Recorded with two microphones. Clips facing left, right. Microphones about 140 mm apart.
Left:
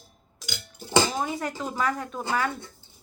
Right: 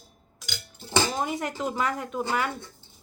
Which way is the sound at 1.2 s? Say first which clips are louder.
Right 1 dB; 20° right (ahead or behind).